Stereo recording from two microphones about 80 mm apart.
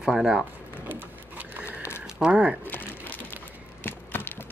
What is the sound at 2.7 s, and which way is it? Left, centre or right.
Crumpling, left.